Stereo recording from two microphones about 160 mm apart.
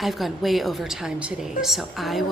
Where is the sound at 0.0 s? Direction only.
Centre (ahead or behind).